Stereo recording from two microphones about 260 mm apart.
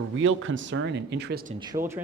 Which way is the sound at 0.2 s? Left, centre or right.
Right.